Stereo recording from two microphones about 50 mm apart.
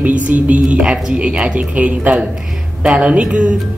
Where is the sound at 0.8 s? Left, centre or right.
Centre.